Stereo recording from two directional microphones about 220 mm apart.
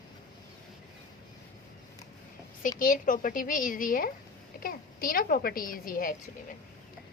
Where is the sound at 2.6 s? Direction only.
40° left (ahead or behind).